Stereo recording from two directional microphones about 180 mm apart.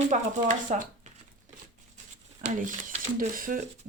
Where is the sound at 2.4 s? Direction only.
45° right (ahead or behind).